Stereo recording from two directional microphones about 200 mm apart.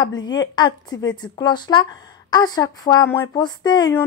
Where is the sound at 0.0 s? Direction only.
20° left (ahead or behind).